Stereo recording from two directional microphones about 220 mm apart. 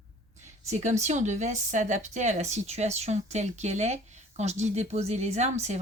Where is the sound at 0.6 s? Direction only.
30° right (ahead or behind).